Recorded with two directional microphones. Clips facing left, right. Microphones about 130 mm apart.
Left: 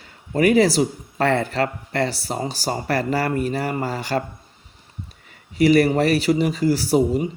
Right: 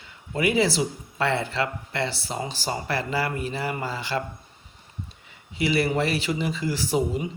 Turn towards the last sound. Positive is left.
turn(degrees=45)  # may be behind; listen again after turning